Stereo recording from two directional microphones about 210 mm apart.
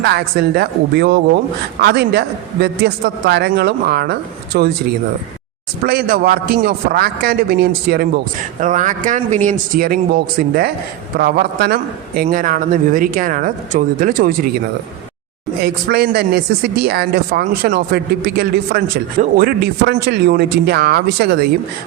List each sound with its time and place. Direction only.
0.0 s a man's voice: 50° right (ahead or behind)
5.8 s a man's voice: 45° right (ahead or behind)
8.6 s a man's voice: 35° right (ahead or behind)
15.6 s a man's voice: 50° right (ahead or behind)